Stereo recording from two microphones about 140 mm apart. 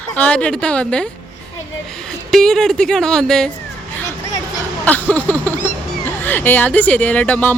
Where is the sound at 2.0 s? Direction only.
5° left (ahead or behind).